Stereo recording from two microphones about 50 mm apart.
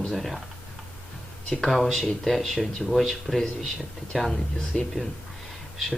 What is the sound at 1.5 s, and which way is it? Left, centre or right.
Speech, centre.